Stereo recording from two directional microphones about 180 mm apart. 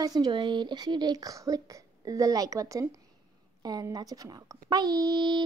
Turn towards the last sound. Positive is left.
turn(degrees=-25)  # may be behind; listen again after turning